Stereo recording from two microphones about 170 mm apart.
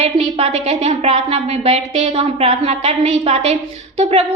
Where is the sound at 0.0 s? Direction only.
35° right (ahead or behind).